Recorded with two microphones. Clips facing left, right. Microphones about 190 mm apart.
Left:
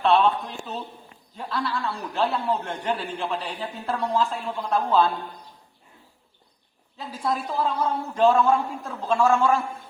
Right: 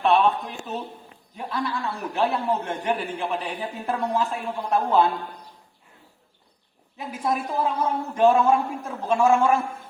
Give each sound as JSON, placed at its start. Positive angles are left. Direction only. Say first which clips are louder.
{"t": 0.0, "sound": "a woman's voice", "louder": "even", "side_deg": -15}
{"t": 1.4, "sound": "a man's voice", "louder": "even", "side_deg": -15}
{"t": 6.9, "sound": "a man's voice", "louder": "right 1 dB", "side_deg": -20}